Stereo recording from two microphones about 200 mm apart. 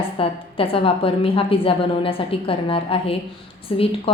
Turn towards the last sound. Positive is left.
turn(degrees=30)  # may be behind; listen again after turning